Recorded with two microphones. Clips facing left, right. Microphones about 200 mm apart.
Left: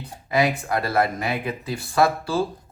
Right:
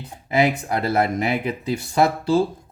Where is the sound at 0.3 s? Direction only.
25° right (ahead or behind).